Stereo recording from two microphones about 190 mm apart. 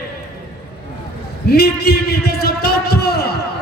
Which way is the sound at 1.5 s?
55° left (ahead or behind).